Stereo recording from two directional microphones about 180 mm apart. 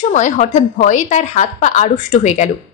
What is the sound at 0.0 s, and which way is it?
A woman's voice, 40° left (ahead or behind).